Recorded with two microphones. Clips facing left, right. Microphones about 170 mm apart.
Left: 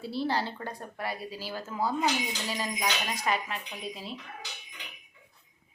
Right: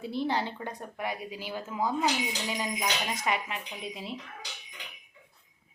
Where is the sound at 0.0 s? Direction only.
20° right (ahead or behind).